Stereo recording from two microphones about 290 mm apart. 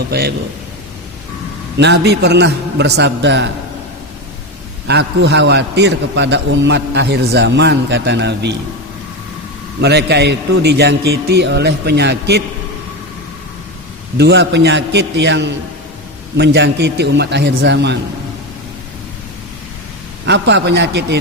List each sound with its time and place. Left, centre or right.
0.1 s a man's voice: right
1.8 s a man's voice: right
4.9 s a man's voice: right
9.8 s a man's voice: right
14.2 s a man's voice: right
20.2 s a man's voice: right